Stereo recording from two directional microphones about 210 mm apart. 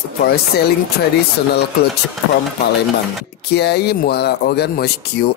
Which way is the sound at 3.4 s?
50° left (ahead or behind).